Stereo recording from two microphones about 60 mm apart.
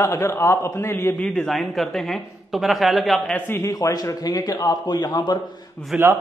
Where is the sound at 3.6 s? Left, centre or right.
Left.